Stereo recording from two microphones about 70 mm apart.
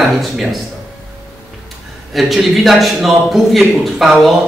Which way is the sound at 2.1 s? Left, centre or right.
Centre.